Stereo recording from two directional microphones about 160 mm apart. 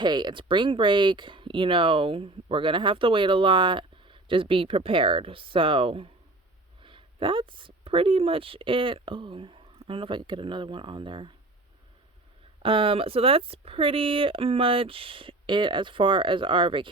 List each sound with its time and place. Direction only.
0.0 s speech: 25° right (ahead or behind)
12.6 s speech: 35° right (ahead or behind)